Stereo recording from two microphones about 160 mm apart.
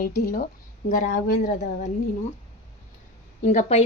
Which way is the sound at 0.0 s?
65° left (ahead or behind).